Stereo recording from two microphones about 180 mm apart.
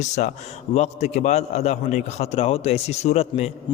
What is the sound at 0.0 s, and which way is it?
A man's voice, 40° left (ahead or behind).